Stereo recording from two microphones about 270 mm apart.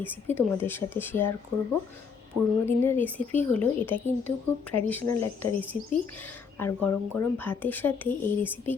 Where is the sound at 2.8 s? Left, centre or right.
Centre.